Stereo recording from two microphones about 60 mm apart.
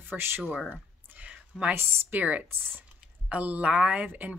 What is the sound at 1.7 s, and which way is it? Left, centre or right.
Speech, right.